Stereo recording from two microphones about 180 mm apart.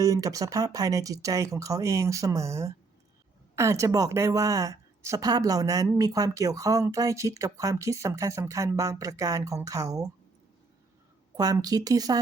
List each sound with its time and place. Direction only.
0.0 s a woman's voice: 20° right (ahead or behind)
11.3 s a woman's voice: 20° right (ahead or behind)